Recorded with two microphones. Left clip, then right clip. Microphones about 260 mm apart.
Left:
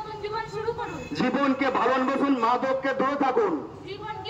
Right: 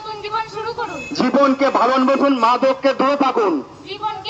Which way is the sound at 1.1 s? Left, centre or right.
Centre.